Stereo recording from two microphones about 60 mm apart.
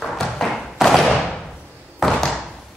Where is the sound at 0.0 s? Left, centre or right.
Centre.